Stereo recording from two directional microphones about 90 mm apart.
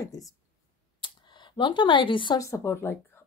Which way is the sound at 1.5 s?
65° left (ahead or behind).